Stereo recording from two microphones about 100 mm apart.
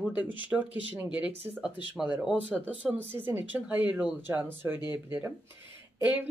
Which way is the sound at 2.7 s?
10° right (ahead or behind).